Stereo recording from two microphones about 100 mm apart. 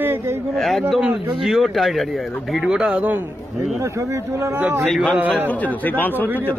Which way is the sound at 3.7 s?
30° right (ahead or behind).